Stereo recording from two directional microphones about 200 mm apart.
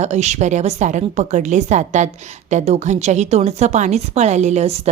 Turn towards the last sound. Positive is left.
turn(degrees=-35)  # may be behind; listen again after turning